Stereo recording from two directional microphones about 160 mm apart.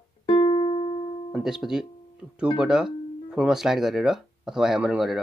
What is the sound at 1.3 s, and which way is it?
Speech, 5° right (ahead or behind).